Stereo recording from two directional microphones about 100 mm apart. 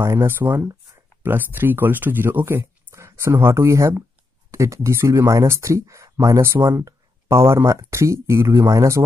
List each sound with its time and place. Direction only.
0.0 s speech: 25° right (ahead or behind)